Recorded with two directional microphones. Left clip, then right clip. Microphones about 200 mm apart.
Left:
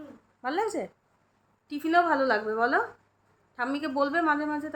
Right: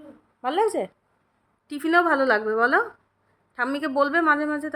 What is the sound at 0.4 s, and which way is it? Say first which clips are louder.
A woman's voice: right 6 dB; 40° right (ahead or behind).